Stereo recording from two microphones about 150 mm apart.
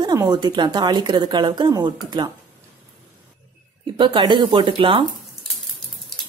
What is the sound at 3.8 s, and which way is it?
Speech, 35° right (ahead or behind).